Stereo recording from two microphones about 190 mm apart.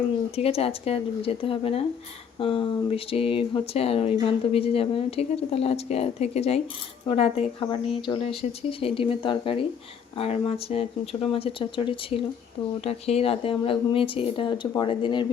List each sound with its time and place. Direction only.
0.3 s speech: 30° left (ahead or behind)